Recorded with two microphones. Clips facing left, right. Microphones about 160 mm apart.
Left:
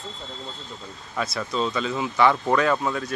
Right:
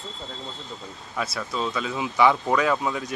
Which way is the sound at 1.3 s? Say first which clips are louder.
Left 4 dB; 5° right (ahead or behind).